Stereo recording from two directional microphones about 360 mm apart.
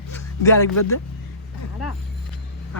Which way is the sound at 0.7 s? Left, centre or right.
Left.